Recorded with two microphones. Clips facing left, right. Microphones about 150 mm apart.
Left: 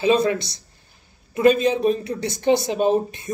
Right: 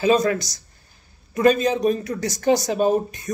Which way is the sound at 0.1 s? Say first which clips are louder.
Left 1 dB; 30° left (ahead or behind).